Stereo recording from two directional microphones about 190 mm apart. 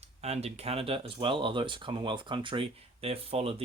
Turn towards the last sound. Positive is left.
turn(degrees=-30)  # may be behind; listen again after turning